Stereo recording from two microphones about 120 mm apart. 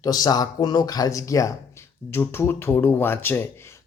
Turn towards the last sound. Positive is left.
turn(degrees=20)  # may be behind; listen again after turning